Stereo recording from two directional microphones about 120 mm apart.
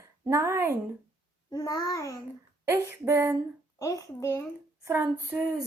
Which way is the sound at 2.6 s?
20° right (ahead or behind).